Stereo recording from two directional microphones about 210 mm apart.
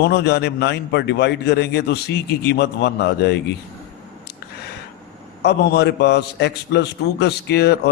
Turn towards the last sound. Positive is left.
turn(degrees=55)  # may be behind; listen again after turning